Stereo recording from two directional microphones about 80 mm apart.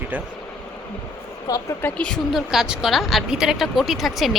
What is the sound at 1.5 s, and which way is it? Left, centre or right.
Speech, left.